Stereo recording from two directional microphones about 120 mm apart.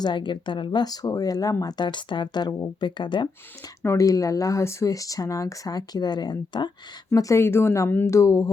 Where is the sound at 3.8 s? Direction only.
25° left (ahead or behind).